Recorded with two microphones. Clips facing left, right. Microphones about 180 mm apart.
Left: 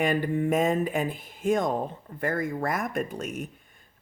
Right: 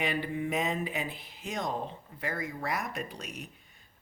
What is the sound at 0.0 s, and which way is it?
Speech, 45° left (ahead or behind).